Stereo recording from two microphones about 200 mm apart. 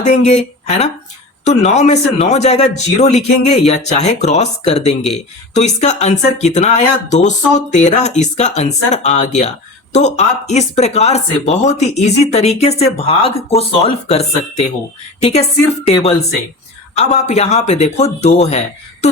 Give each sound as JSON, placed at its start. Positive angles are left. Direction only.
{"t": 0.0, "sound": "speech", "side_deg": 35}
{"t": 19.0, "sound": "music", "side_deg": 35}